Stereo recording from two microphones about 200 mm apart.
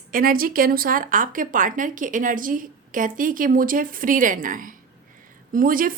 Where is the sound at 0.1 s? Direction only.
45° right (ahead or behind).